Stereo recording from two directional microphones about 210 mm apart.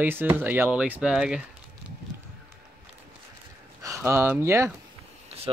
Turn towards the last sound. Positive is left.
turn(degrees=-10)  # may be behind; listen again after turning